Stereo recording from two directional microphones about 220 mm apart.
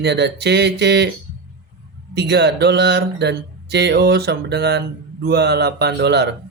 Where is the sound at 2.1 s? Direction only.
50° right (ahead or behind).